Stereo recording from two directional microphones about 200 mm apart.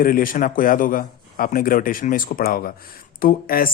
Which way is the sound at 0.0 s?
45° left (ahead or behind).